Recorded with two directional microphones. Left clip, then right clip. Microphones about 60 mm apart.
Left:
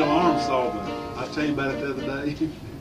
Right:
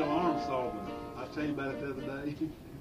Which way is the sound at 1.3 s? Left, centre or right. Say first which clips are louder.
Left 10 dB; left.